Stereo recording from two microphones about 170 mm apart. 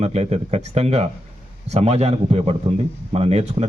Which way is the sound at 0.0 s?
40° right (ahead or behind).